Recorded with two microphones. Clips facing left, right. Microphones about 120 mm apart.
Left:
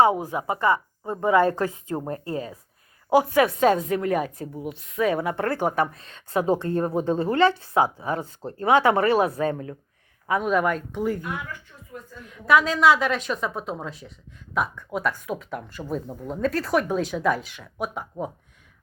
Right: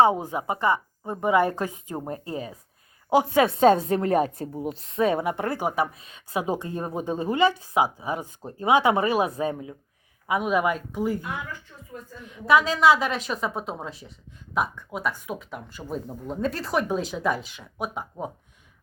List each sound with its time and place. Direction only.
0.2 s a woman's voice: 20° right (ahead or behind); by 18.3 s centre (ahead or behind)